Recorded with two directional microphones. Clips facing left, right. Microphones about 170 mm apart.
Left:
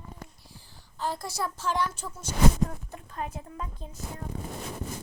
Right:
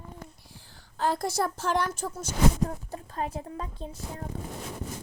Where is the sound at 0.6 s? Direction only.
65° right (ahead or behind); by 3.8 s 30° right (ahead or behind).